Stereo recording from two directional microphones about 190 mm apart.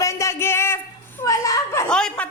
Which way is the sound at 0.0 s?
15° left (ahead or behind).